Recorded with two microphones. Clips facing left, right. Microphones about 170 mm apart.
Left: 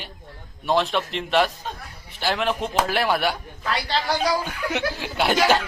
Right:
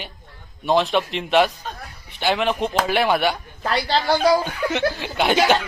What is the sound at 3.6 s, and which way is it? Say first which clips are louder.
Speech: right 4 dB; 35° right (ahead or behind).